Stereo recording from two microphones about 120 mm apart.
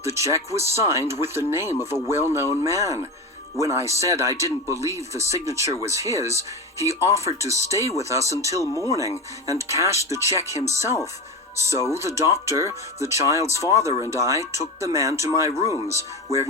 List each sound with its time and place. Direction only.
0.0 s speech: 25° right (ahead or behind)
8.6 s speech: 25° left (ahead or behind)
8.9 s speech: 25° right (ahead or behind)